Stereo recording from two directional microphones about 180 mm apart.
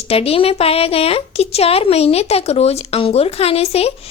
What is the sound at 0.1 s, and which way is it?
A woman's voice, 35° left (ahead or behind).